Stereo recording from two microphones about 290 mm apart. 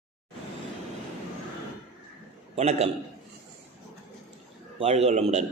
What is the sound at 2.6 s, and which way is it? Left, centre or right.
Speech, right.